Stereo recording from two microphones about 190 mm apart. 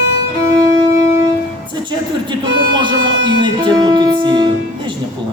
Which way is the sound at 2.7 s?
25° right (ahead or behind).